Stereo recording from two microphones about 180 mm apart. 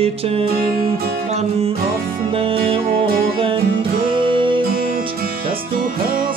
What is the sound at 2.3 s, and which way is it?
Music, 30° right (ahead or behind).